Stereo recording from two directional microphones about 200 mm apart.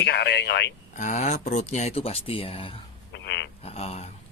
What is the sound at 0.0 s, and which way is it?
Speech, 55° left (ahead or behind).